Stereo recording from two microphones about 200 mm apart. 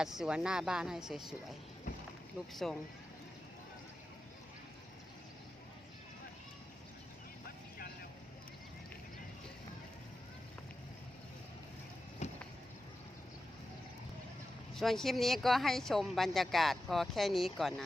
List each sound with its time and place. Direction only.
0.0 s speech: 5° right (ahead or behind)
2.5 s speech: centre (ahead or behind)
12.2 s vehicle: 35° left (ahead or behind)
14.8 s speech: centre (ahead or behind)